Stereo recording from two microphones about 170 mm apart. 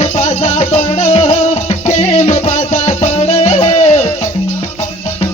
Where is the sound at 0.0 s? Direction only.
40° left (ahead or behind).